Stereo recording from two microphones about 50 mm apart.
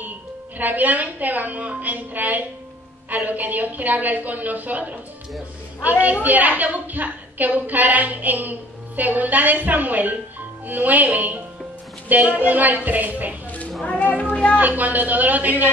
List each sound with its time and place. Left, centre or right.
0.6 s a woman's voice: right
13.5 s a sound: left
13.8 s music: left
14.6 s a woman's voice: right